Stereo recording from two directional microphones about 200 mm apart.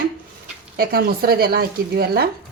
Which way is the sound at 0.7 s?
50° right (ahead or behind).